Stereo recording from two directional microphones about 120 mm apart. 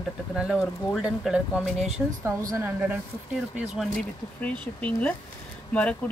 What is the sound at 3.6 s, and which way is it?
Speech, 5° right (ahead or behind).